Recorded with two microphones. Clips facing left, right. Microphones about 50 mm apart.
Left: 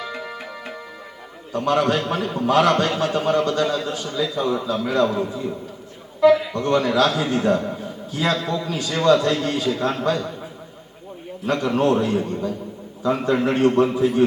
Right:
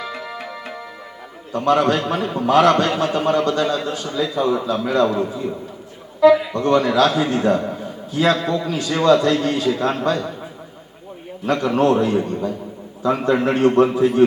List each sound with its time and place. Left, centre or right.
0.2 s tabla: centre
1.5 s a man's voice: centre
11.4 s a man's voice: centre